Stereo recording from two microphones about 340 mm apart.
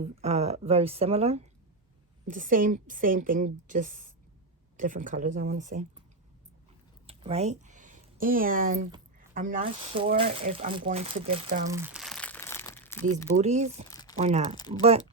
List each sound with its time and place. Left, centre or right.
0.0 s a woman's voice: centre
7.1 s a sound: centre
9.3 s a woman's voice: right
11.7 s crumpling: centre
13.4 s a woman's voice: centre
13.9 s crumpling: centre
14.2 s a woman's voice: centre